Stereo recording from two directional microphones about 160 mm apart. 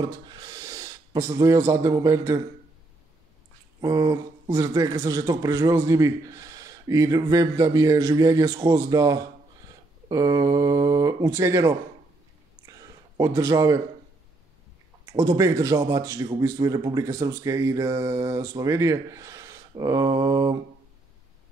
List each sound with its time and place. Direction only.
0.3 s gasp: 25° right (ahead or behind)
3.8 s a man's voice: 25° right (ahead or behind)
13.2 s a man's voice: 20° right (ahead or behind)
15.0 s a man's voice: 20° right (ahead or behind)